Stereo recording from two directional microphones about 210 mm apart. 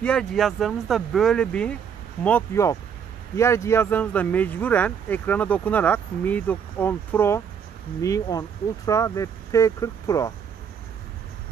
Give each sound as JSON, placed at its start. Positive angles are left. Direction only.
{"t": 0.0, "sound": "speech", "side_deg": 5}